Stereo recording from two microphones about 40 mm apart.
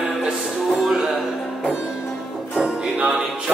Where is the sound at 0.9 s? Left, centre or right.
Centre.